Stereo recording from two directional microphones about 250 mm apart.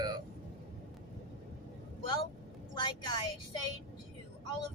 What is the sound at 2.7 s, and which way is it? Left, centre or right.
Speech, centre.